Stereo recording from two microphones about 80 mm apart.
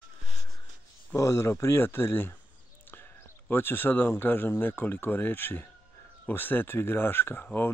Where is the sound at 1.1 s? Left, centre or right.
Left.